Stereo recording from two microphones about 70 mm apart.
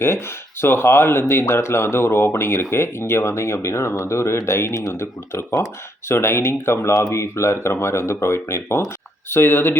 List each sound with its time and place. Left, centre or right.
0.6 s speech: left